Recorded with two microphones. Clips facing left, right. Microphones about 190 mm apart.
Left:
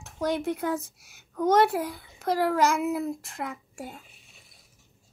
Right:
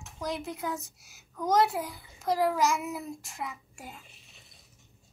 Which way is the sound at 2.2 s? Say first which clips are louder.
Left 2 dB; 65° left (ahead or behind).